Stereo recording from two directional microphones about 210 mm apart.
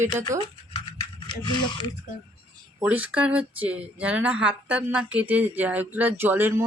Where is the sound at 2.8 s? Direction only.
5° right (ahead or behind).